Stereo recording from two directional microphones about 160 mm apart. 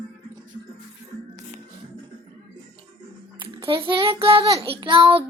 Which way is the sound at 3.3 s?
35° right (ahead or behind).